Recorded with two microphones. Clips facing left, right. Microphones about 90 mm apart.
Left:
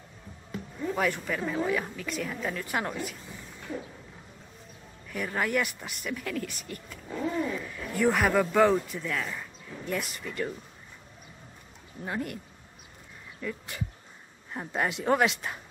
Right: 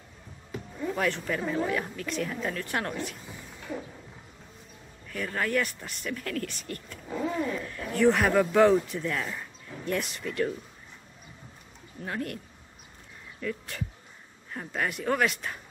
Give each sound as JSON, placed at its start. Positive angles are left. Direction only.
{"t": 0.9, "sound": "a woman's voice", "side_deg": 5}
{"t": 5.0, "sound": "speech", "side_deg": 15}
{"t": 7.1, "sound": "a woman's voice", "side_deg": -5}
{"t": 12.0, "sound": "speech", "side_deg": 10}
{"t": 13.4, "sound": "speech", "side_deg": 10}
{"t": 14.5, "sound": "speech", "side_deg": 20}